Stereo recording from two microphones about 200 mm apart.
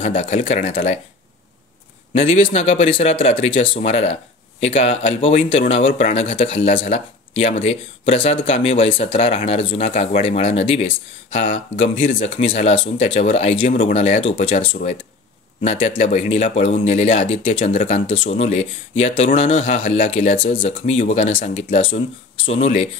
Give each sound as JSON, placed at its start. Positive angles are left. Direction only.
{"t": 0.2, "sound": "speech", "side_deg": 30}
{"t": 2.1, "sound": "speech", "side_deg": 30}